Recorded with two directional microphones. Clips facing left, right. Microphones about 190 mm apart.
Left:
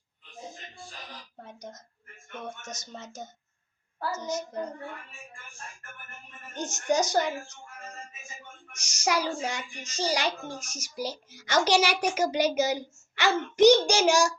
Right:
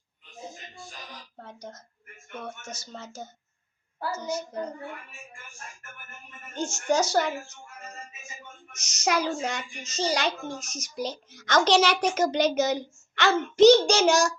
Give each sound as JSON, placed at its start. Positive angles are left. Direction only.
{"t": 1.4, "sound": "a sound", "side_deg": 15}
{"t": 2.7, "sound": "a woman's voice", "side_deg": 20}
{"t": 6.5, "sound": "a child's voice", "side_deg": 20}
{"t": 8.7, "sound": "a child's voice", "side_deg": 10}